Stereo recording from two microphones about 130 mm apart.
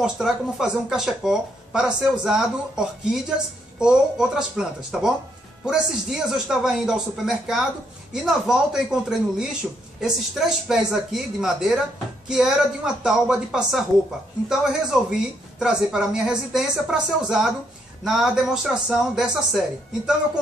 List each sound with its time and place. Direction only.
0.0 s speech: 5° right (ahead or behind)
3.8 s speech: 5° right (ahead or behind)